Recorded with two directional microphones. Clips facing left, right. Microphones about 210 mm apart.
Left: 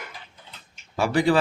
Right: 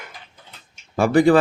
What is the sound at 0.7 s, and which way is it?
Tick-tock, 50° right (ahead or behind).